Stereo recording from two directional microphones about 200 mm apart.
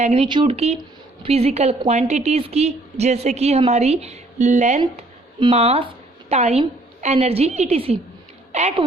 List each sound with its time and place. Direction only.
0.0 s a woman's voice: 25° right (ahead or behind)